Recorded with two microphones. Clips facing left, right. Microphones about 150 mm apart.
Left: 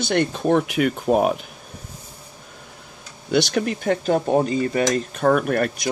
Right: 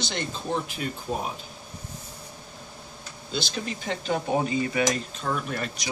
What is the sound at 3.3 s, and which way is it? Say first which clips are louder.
Speech: left 11 dB; 70° left (ahead or behind).